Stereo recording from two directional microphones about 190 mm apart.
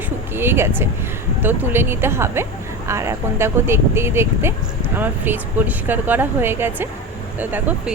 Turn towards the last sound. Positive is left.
turn(degrees=-10)  # may be behind; listen again after turning